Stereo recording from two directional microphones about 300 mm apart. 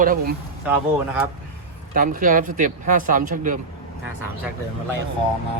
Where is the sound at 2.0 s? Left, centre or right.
Right.